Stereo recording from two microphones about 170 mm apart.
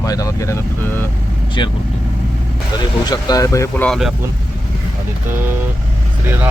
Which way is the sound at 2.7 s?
25° left (ahead or behind).